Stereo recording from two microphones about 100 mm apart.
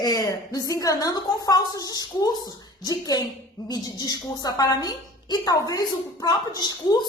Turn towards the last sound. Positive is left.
turn(degrees=45)  # may be behind; listen again after turning